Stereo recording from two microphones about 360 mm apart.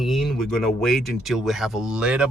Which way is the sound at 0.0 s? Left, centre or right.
Centre.